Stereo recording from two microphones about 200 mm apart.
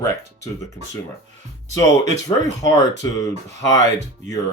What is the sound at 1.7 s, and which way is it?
Speech, 15° left (ahead or behind).